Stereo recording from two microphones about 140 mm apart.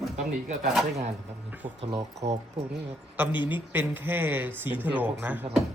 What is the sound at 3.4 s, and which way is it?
A man's voice, 15° right (ahead or behind).